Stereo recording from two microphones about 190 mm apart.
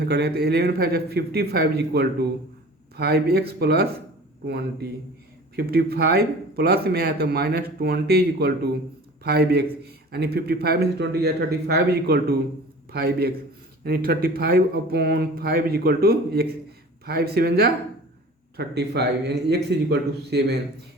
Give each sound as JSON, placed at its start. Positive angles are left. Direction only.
{"t": 0.0, "sound": "a man's voice", "side_deg": -60}